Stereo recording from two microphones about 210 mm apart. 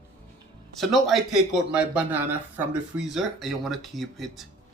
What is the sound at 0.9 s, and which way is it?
Speech, centre (ahead or behind).